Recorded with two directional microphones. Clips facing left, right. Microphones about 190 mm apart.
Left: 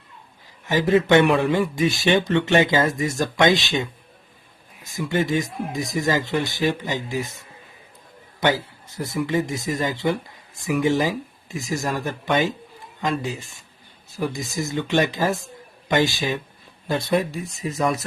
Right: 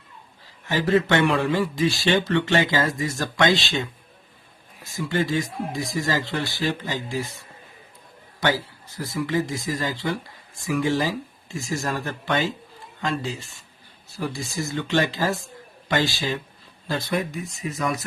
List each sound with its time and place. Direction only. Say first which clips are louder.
0.7 s speech: left 4 dB; 15° left (ahead or behind)
4.9 s speech: left 2 dB; 20° left (ahead or behind)
8.4 s speech: left 2 dB; 20° left (ahead or behind)